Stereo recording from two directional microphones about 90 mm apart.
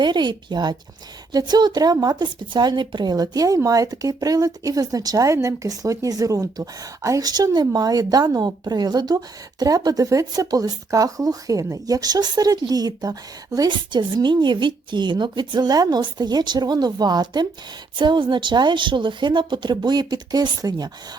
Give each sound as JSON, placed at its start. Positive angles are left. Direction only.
{"t": 0.0, "sound": "a woman's voice", "side_deg": -55}
{"t": 13.7, "sound": "speech", "side_deg": -60}
{"t": 17.9, "sound": "a woman's voice", "side_deg": -60}